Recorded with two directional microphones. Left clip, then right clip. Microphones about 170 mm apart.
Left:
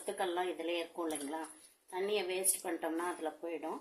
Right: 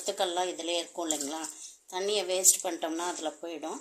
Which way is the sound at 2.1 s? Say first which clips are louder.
Right 10 dB; 50° right (ahead or behind).